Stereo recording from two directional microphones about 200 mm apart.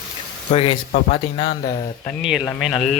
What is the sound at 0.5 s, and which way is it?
Speech, 30° left (ahead or behind).